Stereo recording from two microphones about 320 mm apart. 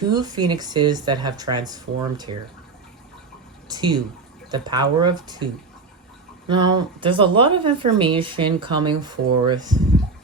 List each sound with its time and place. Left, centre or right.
0.1 s speech: centre
3.7 s speech: centre
6.5 s speech: centre